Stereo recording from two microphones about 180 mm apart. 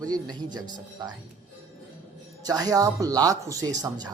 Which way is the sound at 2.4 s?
20° right (ahead or behind).